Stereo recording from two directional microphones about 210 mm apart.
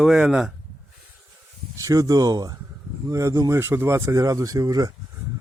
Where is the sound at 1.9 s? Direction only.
15° right (ahead or behind).